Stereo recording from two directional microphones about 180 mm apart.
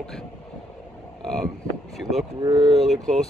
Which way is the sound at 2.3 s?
25° right (ahead or behind).